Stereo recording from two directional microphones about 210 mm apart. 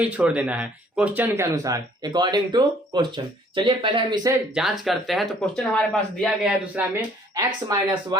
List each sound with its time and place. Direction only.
0.0 s speech: 5° right (ahead or behind)
4.8 s speech: centre (ahead or behind)
7.3 s speech: 20° right (ahead or behind)